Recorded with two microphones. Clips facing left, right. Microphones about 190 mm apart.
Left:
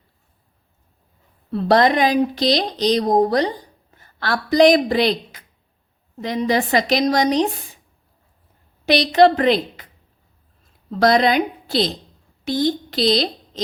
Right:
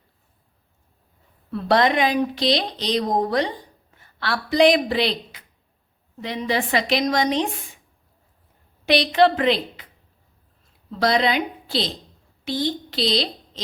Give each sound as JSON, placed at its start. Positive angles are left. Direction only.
{"t": 1.5, "sound": "speech", "side_deg": 35}
{"t": 8.9, "sound": "speech", "side_deg": 40}
{"t": 11.0, "sound": "speech", "side_deg": 45}